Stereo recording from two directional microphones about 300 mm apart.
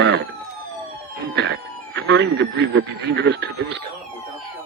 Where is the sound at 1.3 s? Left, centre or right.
Right.